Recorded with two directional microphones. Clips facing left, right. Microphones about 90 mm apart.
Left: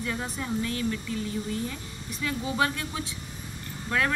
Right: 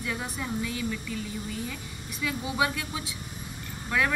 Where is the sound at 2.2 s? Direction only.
5° right (ahead or behind).